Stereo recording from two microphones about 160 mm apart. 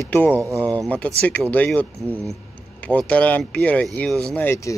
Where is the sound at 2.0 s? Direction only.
15° right (ahead or behind).